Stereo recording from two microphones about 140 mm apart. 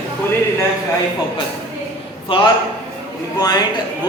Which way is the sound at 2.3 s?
40° left (ahead or behind).